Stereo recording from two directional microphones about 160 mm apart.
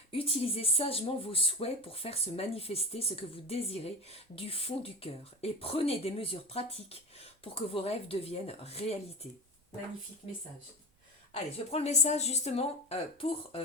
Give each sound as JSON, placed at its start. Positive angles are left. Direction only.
{"t": 0.1, "sound": "speech", "side_deg": 35}
{"t": 11.5, "sound": "speech", "side_deg": 40}